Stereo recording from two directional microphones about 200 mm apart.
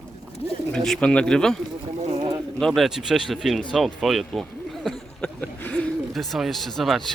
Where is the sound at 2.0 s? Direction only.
30° right (ahead or behind).